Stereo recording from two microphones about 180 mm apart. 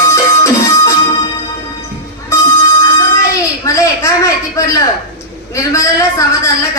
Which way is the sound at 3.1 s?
15° left (ahead or behind).